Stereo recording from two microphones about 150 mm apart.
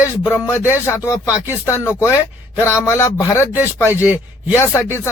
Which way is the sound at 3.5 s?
10° right (ahead or behind).